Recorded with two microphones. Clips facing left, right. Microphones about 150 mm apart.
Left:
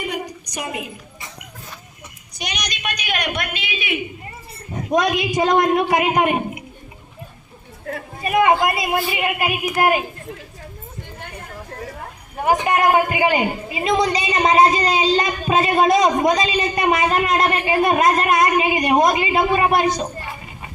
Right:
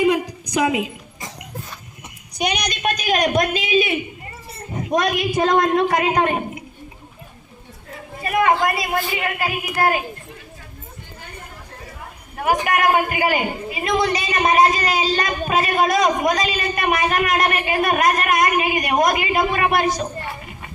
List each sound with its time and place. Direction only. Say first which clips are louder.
0.6 s a woman's voice: right 8 dB; 90° right
2.4 s a man's voice: right 7 dB; 55° right (ahead or behind); by 3.9 s 35° right (ahead or behind)
5.3 s a woman's voice: even; 15° left (ahead or behind)
8.2 s a man's voice: left 2 dB; 20° left (ahead or behind)
12.5 s a man's voice: left 1 dB; 20° left (ahead or behind)